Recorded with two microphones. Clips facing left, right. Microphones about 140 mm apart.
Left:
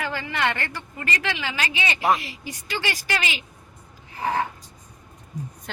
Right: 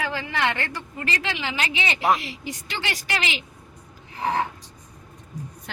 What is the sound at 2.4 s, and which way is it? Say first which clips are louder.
Speech: left 2 dB; 20° right (ahead or behind).